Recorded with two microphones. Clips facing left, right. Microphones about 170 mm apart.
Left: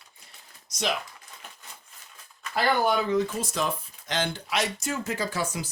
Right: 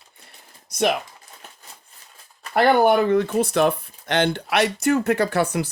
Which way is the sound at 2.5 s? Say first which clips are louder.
Right 8 dB; 60° right (ahead or behind).